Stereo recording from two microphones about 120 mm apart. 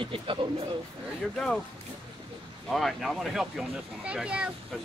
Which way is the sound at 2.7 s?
Centre (ahead or behind).